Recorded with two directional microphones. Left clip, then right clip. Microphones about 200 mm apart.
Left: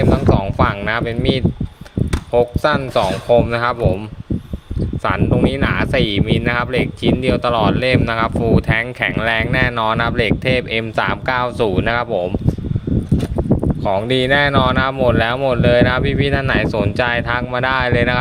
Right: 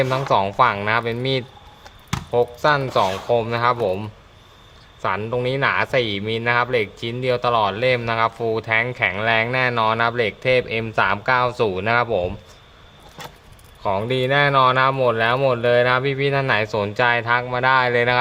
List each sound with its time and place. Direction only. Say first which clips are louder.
0.0 s speech: left 2 dB; 10° left (ahead or behind)
5.0 s speech: left 4 dB; 20° left (ahead or behind)
13.8 s speech: left 3 dB; 20° left (ahead or behind)